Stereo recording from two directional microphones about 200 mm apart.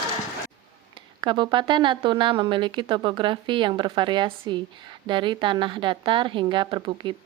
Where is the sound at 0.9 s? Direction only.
25° right (ahead or behind).